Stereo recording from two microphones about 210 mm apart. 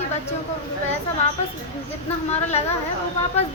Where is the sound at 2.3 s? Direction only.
30° left (ahead or behind).